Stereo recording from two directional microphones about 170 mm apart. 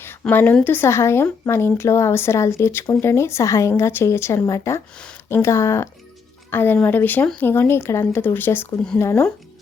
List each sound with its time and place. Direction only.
0.0 s speech: 10° left (ahead or behind)